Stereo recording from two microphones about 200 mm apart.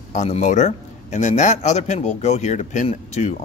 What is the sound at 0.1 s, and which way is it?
Speech, 35° left (ahead or behind).